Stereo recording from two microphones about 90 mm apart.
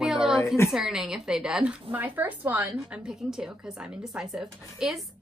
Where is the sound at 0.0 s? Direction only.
5° right (ahead or behind).